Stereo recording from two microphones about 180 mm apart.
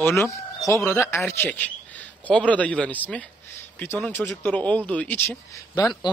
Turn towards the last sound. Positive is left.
turn(degrees=15)  # may be behind; listen again after turning